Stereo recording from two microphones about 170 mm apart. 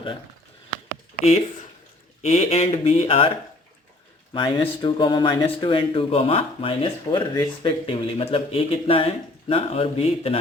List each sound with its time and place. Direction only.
1.2 s speech: 40° left (ahead or behind)
4.4 s speech: 30° left (ahead or behind)